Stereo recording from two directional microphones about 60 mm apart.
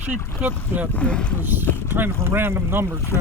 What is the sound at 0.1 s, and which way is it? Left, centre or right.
Speech, right.